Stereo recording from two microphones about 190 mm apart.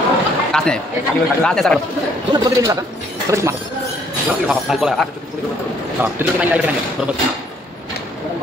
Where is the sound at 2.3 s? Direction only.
15° right (ahead or behind).